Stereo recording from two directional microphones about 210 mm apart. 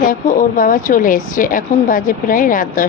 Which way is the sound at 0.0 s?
40° left (ahead or behind).